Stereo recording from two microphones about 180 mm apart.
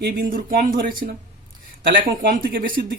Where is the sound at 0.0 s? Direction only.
55° right (ahead or behind).